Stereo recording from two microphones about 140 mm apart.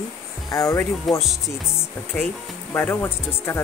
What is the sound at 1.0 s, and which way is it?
Speech, centre (ahead or behind).